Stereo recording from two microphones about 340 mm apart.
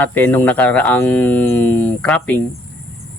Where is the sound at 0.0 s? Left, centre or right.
Centre.